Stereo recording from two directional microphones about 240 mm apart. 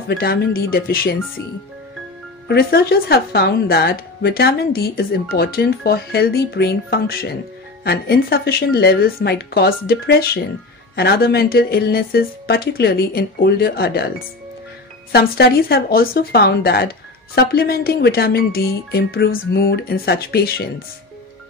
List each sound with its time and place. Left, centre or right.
0.1 s speech: left
2.4 s speech: left
15.1 s speech: left